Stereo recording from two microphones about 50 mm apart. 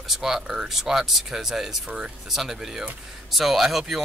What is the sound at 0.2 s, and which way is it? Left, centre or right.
Speech, centre.